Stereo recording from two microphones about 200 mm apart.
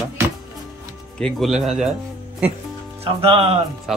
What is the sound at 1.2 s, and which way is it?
Speech, 5° left (ahead or behind).